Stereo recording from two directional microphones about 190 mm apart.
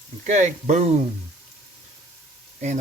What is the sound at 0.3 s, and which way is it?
Speech, 40° right (ahead or behind).